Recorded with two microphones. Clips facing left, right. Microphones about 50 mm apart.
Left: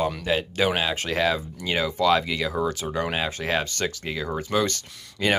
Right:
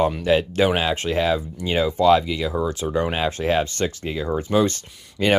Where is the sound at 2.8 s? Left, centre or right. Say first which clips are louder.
Right 4 dB; right.